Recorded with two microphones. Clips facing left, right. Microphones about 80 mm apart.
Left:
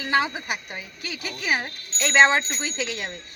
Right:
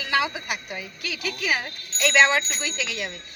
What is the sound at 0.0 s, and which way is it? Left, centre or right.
Speech, left.